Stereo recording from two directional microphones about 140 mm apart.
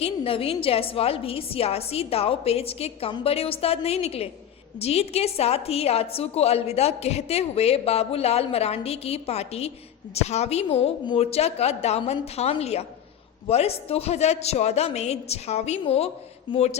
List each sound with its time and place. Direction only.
0.0 s a woman's voice: 40° left (ahead or behind)